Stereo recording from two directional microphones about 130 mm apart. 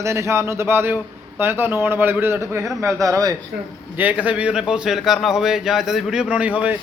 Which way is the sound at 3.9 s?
10° right (ahead or behind).